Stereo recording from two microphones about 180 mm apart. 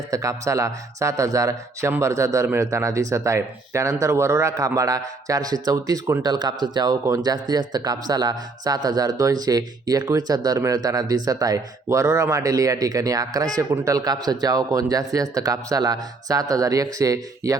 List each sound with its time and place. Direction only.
0.1 s speech: 20° right (ahead or behind)